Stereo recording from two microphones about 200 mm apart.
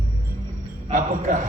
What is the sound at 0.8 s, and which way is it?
Speech, 40° right (ahead or behind).